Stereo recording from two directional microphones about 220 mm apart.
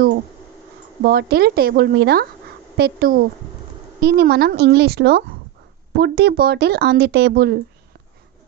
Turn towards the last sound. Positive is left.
turn(degrees=-50)  # may be behind; listen again after turning